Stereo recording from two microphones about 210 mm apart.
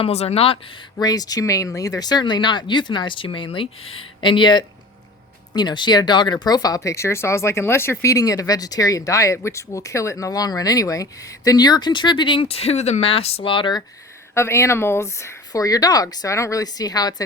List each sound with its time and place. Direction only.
0.0 s speech: 30° left (ahead or behind)